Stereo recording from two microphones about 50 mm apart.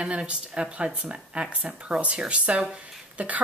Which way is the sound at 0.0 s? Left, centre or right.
Right.